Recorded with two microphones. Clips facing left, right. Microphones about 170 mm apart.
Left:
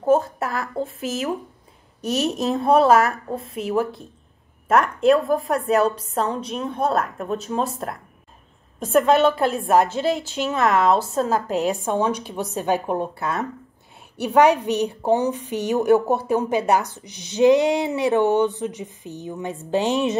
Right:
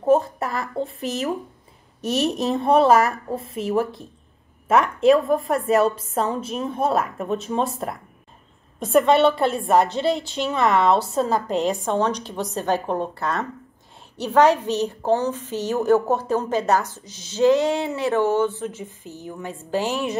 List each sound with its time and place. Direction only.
0.0 s a woman's voice: centre (ahead or behind); by 20.2 s 20° left (ahead or behind)